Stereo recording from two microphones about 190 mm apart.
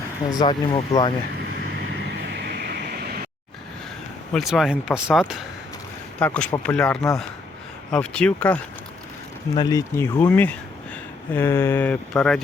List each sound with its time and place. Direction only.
0.3 s speech: 20° left (ahead or behind)
2.3 s vehicle: 55° right (ahead or behind)
4.3 s speech: centre (ahead or behind)
6.1 s speech: 5° left (ahead or behind)
9.6 s speech: 20° left (ahead or behind)